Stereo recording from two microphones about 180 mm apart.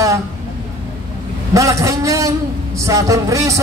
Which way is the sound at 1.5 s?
15° right (ahead or behind).